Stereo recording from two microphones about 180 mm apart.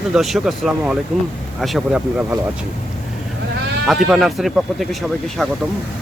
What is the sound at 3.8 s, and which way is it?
Speech, centre (ahead or behind).